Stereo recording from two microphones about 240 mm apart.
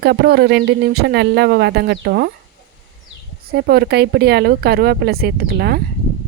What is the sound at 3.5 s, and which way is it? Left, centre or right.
Speech, right.